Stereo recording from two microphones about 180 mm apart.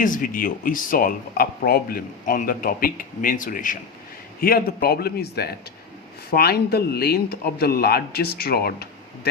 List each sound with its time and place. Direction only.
0.0 s a man's voice: 50° left (ahead or behind)